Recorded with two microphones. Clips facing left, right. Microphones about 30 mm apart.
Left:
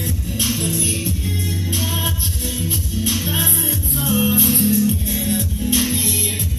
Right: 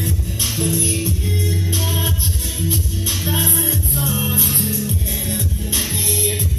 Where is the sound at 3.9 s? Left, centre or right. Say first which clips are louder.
Left 7 dB; left.